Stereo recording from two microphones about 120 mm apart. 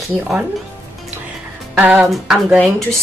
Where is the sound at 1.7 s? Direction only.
10° right (ahead or behind).